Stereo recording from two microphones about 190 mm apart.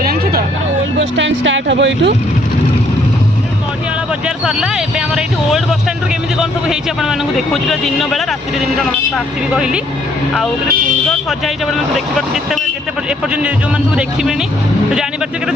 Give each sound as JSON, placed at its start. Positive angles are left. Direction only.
{"t": 0.0, "sound": "vehicle", "side_deg": -55}
{"t": 0.9, "sound": "speech", "side_deg": -75}
{"t": 4.4, "sound": "a sound", "side_deg": -5}
{"t": 6.4, "sound": "speech", "side_deg": 0}
{"t": 11.3, "sound": "speech", "side_deg": 0}